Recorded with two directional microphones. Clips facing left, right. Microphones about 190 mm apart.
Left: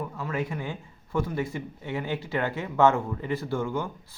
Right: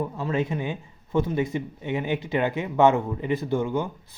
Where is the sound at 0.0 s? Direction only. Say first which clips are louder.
Right 5 dB; 25° right (ahead or behind).